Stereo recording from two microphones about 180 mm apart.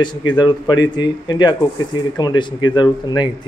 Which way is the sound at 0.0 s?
25° left (ahead or behind).